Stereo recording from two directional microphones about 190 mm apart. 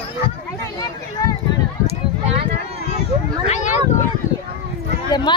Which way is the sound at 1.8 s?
35° right (ahead or behind).